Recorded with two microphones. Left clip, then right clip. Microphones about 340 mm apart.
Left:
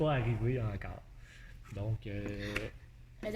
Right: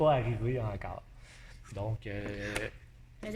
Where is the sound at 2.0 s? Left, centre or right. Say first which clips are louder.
Right 3 dB; right.